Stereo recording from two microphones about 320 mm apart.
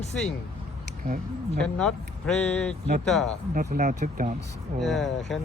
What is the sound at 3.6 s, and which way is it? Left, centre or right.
Speech, right.